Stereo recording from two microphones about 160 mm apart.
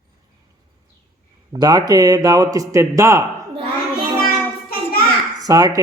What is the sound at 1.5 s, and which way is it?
Speech, 25° right (ahead or behind).